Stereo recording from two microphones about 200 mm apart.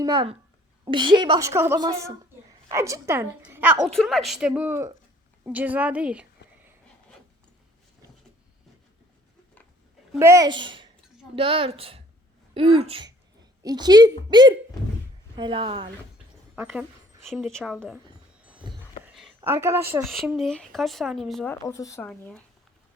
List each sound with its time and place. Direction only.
0.0 s a woman's voice: 20° right (ahead or behind)
1.5 s a woman's voice: 10° right (ahead or behind)
3.8 s speech: centre (ahead or behind)
5.4 s a sound: 10° right (ahead or behind)
10.2 s a woman's voice: 15° right (ahead or behind)
16.6 s a woman's voice: 5° right (ahead or behind)
19.0 s a sound: centre (ahead or behind)
19.4 s a woman's voice: 10° right (ahead or behind)
20.1 s speech: centre (ahead or behind)
21.6 s speech: 15° left (ahead or behind)
22.1 s speech: 5° left (ahead or behind)